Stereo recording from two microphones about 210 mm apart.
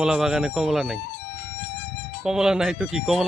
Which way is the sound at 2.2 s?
5° right (ahead or behind).